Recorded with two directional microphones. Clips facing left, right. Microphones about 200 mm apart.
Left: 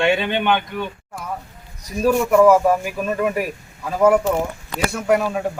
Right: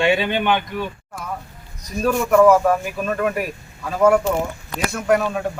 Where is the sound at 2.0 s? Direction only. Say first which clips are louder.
Left 1 dB; 5° left (ahead or behind).